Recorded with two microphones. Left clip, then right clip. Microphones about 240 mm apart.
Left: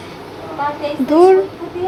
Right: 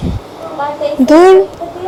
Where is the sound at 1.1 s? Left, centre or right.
Right.